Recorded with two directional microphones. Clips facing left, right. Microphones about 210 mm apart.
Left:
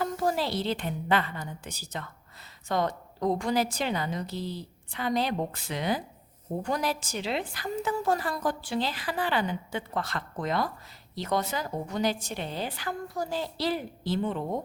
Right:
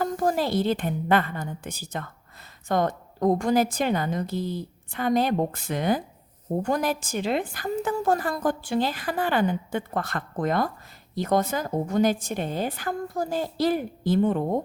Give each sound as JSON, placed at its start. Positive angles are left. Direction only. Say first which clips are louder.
{"t": 0.0, "sound": "a woman's voice", "louder": "right 4 dB", "side_deg": -50}